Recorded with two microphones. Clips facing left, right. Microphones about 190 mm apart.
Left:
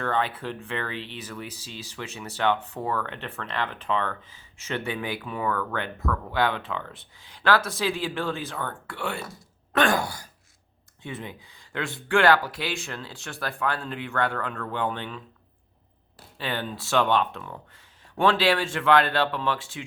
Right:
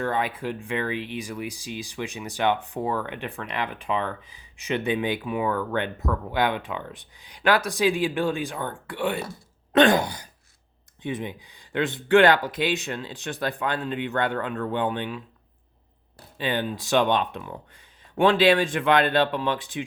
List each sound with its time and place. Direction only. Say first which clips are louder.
0.0 s speech: right 1 dB; 10° right (ahead or behind)
16.4 s speech: right 4 dB; 15° right (ahead or behind)